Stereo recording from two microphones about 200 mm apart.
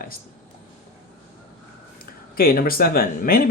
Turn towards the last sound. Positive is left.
turn(degrees=50)  # may be behind; listen again after turning